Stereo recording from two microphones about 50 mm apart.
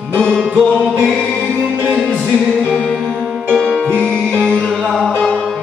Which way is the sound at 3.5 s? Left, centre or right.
Centre.